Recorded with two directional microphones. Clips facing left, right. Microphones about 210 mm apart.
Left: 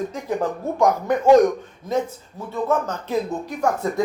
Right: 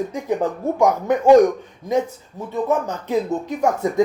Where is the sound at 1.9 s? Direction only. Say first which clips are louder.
Right 3 dB; 15° right (ahead or behind).